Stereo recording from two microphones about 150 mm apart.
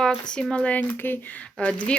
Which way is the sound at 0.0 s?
5° left (ahead or behind).